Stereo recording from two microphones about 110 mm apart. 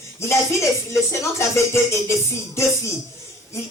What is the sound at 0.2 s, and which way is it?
Speech, 25° left (ahead or behind).